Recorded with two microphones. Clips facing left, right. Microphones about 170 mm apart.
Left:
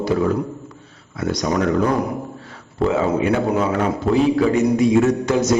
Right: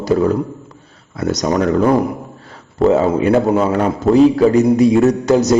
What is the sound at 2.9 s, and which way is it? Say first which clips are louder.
Mantra: right 6 dB; 40° right (ahead or behind).